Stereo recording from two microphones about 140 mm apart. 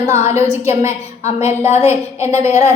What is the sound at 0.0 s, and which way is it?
Speech, 20° right (ahead or behind).